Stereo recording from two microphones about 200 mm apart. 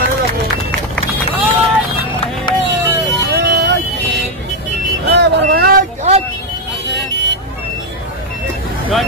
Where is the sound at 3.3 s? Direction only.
60° right (ahead or behind).